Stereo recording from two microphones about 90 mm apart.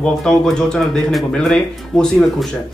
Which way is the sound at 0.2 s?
5° left (ahead or behind).